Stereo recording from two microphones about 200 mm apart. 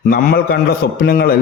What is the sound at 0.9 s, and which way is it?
Speech, 50° left (ahead or behind).